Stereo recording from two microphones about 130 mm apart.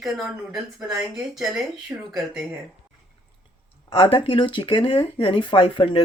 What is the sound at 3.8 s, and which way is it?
Speech, 45° left (ahead or behind).